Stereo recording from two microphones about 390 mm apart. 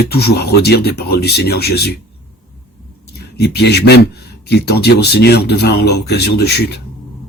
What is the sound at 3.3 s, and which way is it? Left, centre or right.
Speech, left.